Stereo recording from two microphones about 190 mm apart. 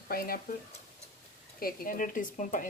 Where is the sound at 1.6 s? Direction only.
50° left (ahead or behind).